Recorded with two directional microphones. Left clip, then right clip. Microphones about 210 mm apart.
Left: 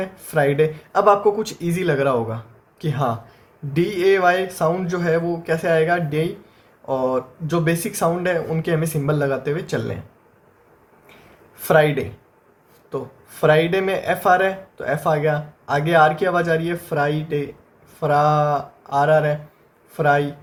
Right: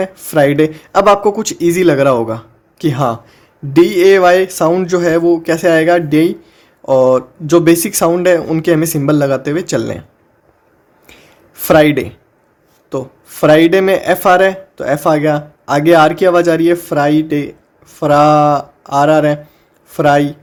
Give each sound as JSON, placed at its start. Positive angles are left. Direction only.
{"t": 0.0, "sound": "speech", "side_deg": -55}
{"t": 11.0, "sound": "a sound", "side_deg": -55}
{"t": 12.9, "sound": "speech", "side_deg": -55}